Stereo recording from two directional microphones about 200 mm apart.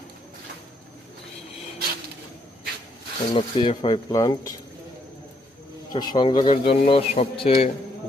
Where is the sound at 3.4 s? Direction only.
25° left (ahead or behind).